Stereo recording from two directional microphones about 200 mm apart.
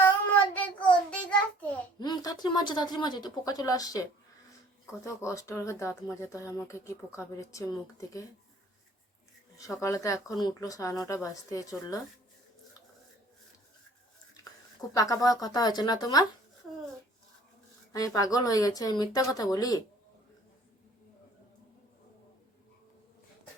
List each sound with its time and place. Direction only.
0.0 s child singing: 10° left (ahead or behind)
2.0 s a woman's voice: 20° left (ahead or behind)
5.0 s speech: 15° left (ahead or behind)
9.6 s speech: 15° left (ahead or behind)
14.9 s speech: 15° left (ahead or behind)
17.9 s speech: 15° left (ahead or behind)